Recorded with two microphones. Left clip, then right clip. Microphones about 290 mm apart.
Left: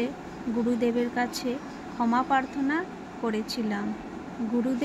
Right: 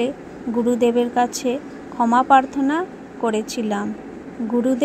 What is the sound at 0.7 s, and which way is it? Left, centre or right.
A woman's voice, right.